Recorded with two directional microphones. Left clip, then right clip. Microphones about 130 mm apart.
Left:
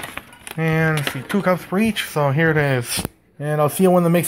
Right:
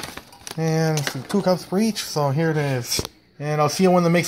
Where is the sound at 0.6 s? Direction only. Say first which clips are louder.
Left 3 dB; 20° right (ahead or behind).